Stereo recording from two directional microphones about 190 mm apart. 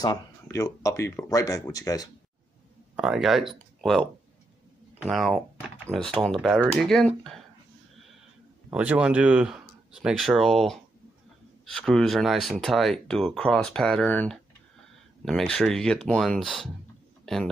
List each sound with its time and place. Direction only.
0.0 s speech: 20° left (ahead or behind)
3.0 s speech: centre (ahead or behind)
8.6 s speech: 5° right (ahead or behind)